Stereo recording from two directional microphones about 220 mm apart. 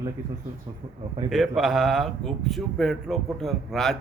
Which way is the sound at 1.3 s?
Centre (ahead or behind).